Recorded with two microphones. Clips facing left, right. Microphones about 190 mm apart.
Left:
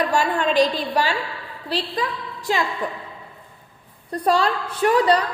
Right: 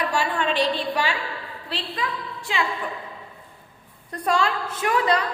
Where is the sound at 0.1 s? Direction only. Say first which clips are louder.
Left 4 dB; 40° left (ahead or behind).